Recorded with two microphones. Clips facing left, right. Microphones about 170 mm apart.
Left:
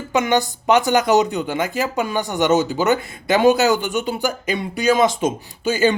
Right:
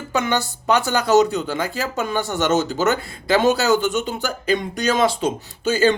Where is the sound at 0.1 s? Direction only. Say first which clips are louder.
Left 3 dB; 15° left (ahead or behind).